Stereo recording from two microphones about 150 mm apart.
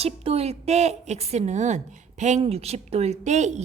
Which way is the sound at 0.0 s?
40° right (ahead or behind).